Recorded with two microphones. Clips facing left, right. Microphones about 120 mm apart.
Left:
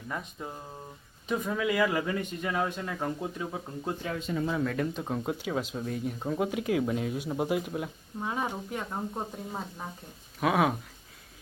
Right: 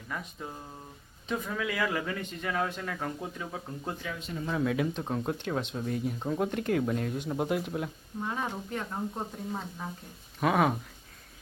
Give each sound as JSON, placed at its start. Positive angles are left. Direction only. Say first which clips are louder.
{"t": 0.4, "sound": "speech", "louder": "left 1 dB", "side_deg": 20}
{"t": 4.4, "sound": "speech", "louder": "right 3 dB", "side_deg": -5}
{"t": 8.2, "sound": "speech", "louder": "left 1 dB", "side_deg": 10}